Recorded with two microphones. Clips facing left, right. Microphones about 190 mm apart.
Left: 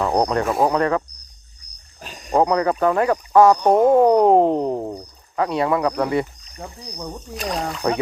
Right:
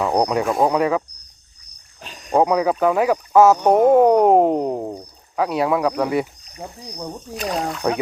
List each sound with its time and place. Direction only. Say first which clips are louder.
0.0 s speech: even; 5° right (ahead or behind)
2.2 s speech: right 1 dB; 5° right (ahead or behind)